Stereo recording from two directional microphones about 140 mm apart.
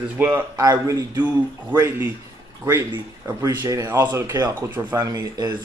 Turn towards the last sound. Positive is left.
turn(degrees=-30)  # may be behind; listen again after turning